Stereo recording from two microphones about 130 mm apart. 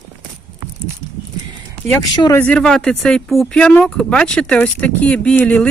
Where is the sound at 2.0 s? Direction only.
35° left (ahead or behind).